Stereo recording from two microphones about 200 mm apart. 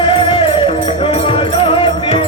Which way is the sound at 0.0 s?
25° left (ahead or behind).